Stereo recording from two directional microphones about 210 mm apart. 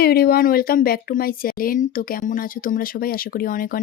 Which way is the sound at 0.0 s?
45° left (ahead or behind).